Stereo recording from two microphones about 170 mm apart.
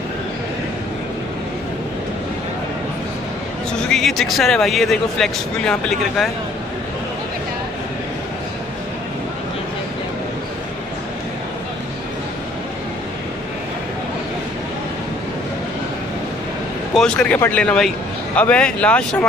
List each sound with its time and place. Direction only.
3.7 s speech: centre (ahead or behind)
16.9 s a man's voice: 5° left (ahead or behind)